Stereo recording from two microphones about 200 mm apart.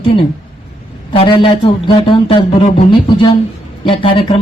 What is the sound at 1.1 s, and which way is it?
Speech, 25° left (ahead or behind).